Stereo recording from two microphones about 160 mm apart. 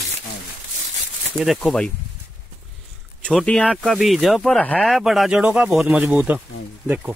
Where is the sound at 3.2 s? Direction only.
5° left (ahead or behind); by 6.4 s 10° right (ahead or behind).